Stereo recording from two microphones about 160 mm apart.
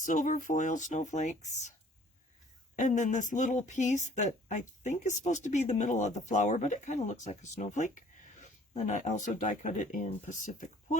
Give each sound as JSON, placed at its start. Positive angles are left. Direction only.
{"t": 0.0, "sound": "speech", "side_deg": 55}
{"t": 2.7, "sound": "speech", "side_deg": 50}